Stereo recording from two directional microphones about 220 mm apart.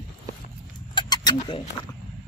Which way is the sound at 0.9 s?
20° left (ahead or behind).